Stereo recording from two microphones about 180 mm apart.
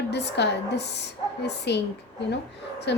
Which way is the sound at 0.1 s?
70° left (ahead or behind).